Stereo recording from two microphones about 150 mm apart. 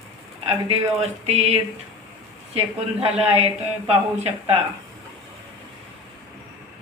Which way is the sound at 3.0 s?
40° right (ahead or behind).